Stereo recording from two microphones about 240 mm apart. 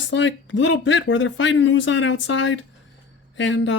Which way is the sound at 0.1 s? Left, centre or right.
Left.